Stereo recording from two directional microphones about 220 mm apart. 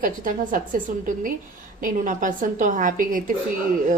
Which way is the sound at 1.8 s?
35° right (ahead or behind).